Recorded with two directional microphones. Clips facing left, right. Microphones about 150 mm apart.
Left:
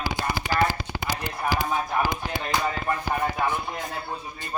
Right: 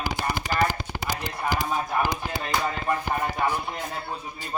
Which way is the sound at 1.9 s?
5° right (ahead or behind).